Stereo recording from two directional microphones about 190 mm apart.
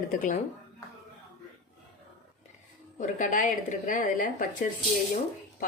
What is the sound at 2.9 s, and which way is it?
A woman's voice, 45° left (ahead or behind).